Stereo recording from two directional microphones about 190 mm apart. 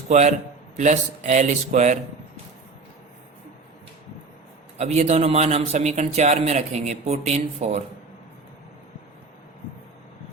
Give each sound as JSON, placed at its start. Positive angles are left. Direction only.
{"t": 0.1, "sound": "speech", "side_deg": -35}
{"t": 4.8, "sound": "speech", "side_deg": -35}